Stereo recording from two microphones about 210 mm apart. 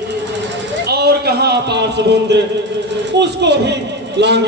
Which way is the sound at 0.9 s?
50° right (ahead or behind).